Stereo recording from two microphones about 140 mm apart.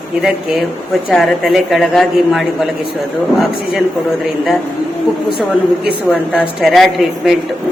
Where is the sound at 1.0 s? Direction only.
Centre (ahead or behind).